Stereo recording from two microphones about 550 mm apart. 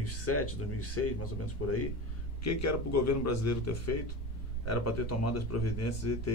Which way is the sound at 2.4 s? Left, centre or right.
Left.